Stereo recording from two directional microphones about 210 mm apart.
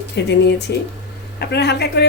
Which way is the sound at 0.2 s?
55° left (ahead or behind).